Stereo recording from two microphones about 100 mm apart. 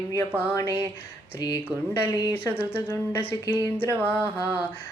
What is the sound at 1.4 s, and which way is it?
Speech, 40° left (ahead or behind).